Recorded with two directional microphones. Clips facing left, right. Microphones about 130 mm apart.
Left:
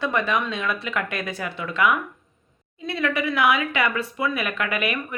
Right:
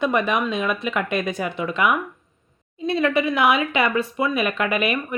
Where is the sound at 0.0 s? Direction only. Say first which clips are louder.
Right 3 dB; 20° right (ahead or behind).